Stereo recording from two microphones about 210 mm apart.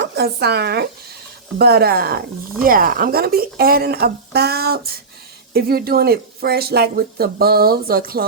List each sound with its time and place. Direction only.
0.0 s speech: 50° right (ahead or behind)